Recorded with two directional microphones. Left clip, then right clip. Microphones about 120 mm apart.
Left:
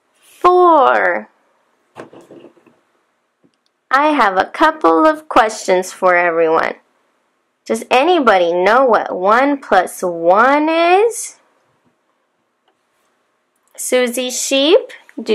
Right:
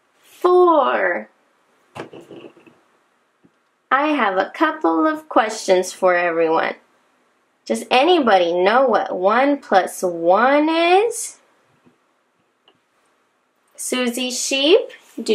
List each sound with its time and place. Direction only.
0.4 s a sound: 50° left (ahead or behind)
4.0 s speech: 45° left (ahead or behind)
13.7 s speech: 45° left (ahead or behind)